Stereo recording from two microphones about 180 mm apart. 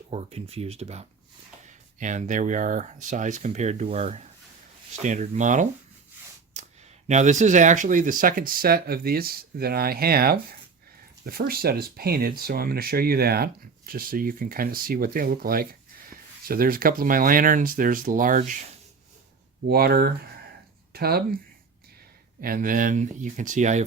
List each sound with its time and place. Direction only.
0.1 s speech: 35° right (ahead or behind)
6.5 s a sound: 40° right (ahead or behind)
7.1 s speech: 40° right (ahead or behind)
19.6 s speech: 60° right (ahead or behind)
22.4 s speech: 50° right (ahead or behind)